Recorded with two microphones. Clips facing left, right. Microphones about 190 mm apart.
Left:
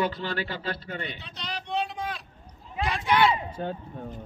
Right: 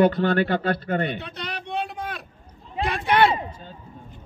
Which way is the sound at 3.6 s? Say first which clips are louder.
Left 11 dB; 65° left (ahead or behind).